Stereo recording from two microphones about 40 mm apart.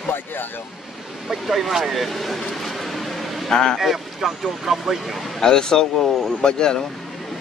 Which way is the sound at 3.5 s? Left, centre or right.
Centre.